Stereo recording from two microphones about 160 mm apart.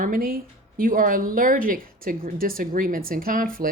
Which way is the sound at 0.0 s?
60° right (ahead or behind).